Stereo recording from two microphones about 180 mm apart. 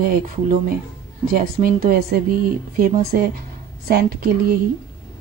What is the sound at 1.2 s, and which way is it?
A woman's voice, 55° right (ahead or behind).